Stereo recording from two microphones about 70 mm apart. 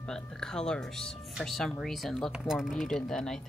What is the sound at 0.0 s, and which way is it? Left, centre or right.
A woman's voice, centre.